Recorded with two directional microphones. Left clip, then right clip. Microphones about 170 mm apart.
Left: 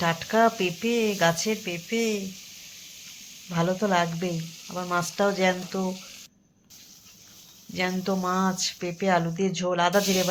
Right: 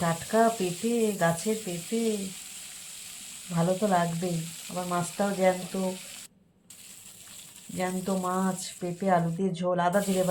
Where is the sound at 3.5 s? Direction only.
35° left (ahead or behind).